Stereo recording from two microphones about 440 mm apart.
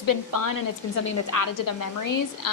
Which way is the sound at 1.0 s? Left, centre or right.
Left.